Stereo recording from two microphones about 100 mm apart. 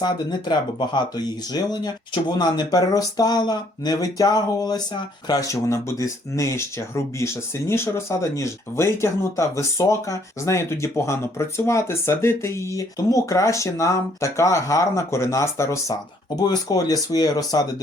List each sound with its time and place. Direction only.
0.0 s speech: 45° left (ahead or behind); by 16.0 s 30° left (ahead or behind)
16.3 s speech: 40° left (ahead or behind)